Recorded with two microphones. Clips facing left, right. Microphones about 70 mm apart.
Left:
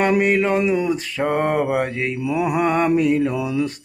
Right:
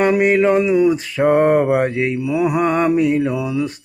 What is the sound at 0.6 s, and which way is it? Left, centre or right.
Speech, centre.